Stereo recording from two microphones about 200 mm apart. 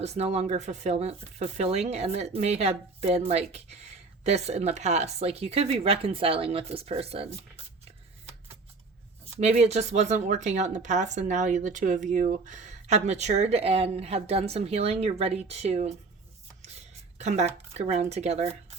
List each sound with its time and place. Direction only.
0.0 s speech: 35° right (ahead or behind)
9.4 s speech: 35° right (ahead or behind)
17.2 s speech: 35° right (ahead or behind)